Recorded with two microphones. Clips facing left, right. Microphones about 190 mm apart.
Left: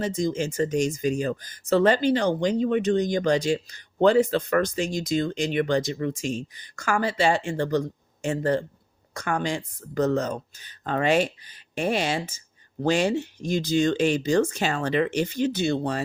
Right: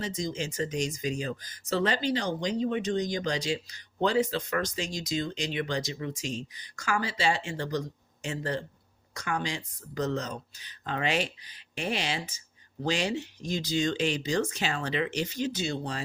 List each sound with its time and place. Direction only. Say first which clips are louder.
0.0 s speech: left 7 dB; 55° left (ahead or behind)